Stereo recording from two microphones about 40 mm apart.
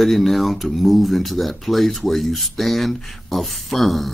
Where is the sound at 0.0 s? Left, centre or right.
Centre.